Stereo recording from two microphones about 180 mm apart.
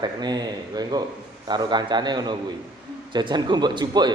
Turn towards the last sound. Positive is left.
turn(degrees=-25)  # may be behind; listen again after turning